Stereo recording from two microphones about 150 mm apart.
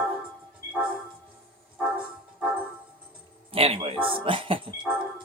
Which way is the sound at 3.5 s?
40° right (ahead or behind).